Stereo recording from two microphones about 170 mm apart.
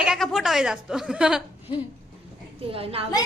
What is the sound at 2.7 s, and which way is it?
Speech, 35° right (ahead or behind).